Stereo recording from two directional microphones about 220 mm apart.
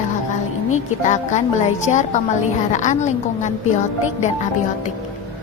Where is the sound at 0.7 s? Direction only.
35° left (ahead or behind).